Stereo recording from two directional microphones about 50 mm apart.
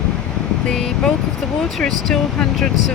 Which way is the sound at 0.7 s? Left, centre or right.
Centre.